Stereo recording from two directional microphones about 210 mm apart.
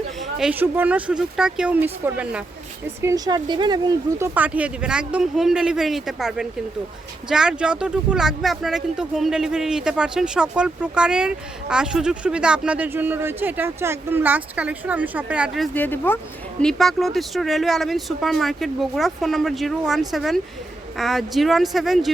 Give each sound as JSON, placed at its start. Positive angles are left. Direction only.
{"t": 0.2, "sound": "speech", "side_deg": 0}
{"t": 4.4, "sound": "speech", "side_deg": -5}